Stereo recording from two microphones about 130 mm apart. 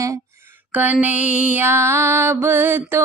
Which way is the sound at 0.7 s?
15° right (ahead or behind).